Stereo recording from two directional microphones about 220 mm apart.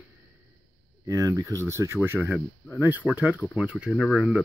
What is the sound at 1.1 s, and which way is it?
Speech, 15° right (ahead or behind).